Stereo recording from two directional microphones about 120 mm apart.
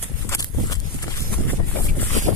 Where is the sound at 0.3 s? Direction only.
25° left (ahead or behind).